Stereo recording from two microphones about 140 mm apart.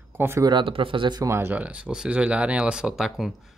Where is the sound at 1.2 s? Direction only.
20° right (ahead or behind).